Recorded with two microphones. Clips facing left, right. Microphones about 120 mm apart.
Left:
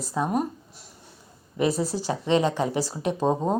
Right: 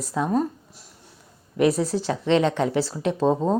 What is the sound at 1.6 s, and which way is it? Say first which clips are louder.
Speech: right 4 dB; centre (ahead or behind).